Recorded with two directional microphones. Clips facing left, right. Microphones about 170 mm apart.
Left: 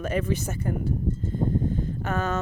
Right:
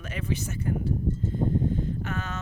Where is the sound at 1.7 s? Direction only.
45° left (ahead or behind).